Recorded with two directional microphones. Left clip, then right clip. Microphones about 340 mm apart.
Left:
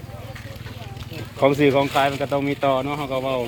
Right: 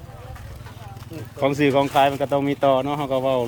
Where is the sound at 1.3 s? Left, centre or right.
Centre.